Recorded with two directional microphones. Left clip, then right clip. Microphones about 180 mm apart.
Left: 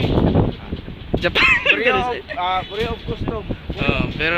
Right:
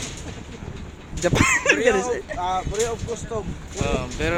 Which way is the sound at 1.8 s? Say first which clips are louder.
Left 2 dB; 15° left (ahead or behind).